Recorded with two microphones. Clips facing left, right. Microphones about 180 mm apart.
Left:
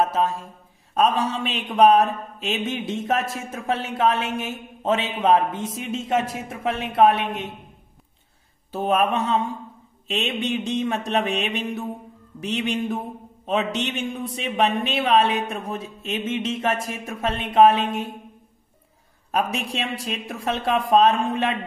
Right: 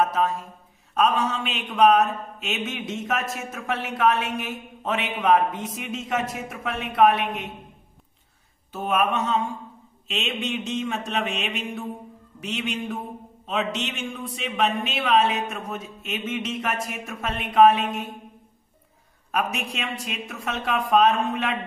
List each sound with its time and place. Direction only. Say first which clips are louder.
0.0 s a woman's voice: left 1 dB; 30° left (ahead or behind)
8.7 s speech: left 3 dB; 35° left (ahead or behind)
19.3 s speech: left 3 dB; 30° left (ahead or behind)